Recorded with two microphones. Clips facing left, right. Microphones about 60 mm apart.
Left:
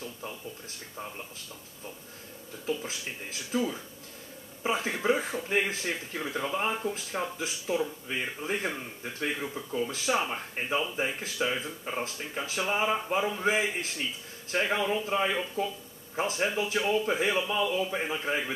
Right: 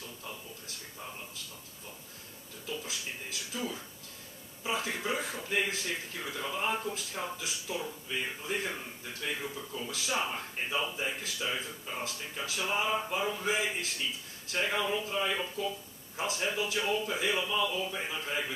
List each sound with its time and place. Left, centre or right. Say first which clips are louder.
2.6 s speech: left 6 dB; left
4.6 s a man's voice: left 6 dB; left
15.0 s a man's voice: left 4 dB; left